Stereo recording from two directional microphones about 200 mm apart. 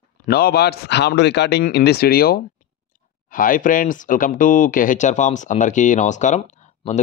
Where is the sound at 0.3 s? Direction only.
50° left (ahead or behind).